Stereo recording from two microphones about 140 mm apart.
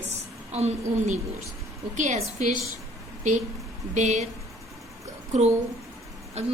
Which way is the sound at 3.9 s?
55° right (ahead or behind).